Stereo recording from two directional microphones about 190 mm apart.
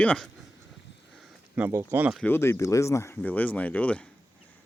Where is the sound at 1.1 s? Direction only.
5° right (ahead or behind).